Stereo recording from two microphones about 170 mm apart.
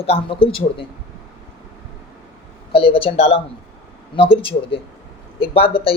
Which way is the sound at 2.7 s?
30° left (ahead or behind).